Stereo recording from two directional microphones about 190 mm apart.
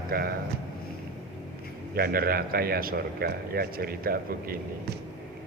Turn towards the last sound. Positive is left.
turn(degrees=-50)  # may be behind; listen again after turning